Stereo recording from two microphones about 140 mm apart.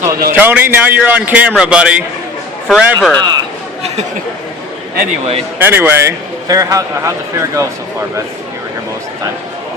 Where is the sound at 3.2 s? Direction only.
30° right (ahead or behind).